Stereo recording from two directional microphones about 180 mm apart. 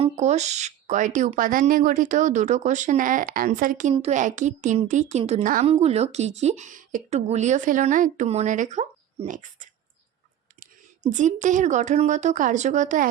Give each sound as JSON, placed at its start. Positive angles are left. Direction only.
{"t": 0.0, "sound": "speech", "side_deg": -40}
{"t": 5.6, "sound": "speech", "side_deg": -35}
{"t": 11.1, "sound": "speech", "side_deg": -40}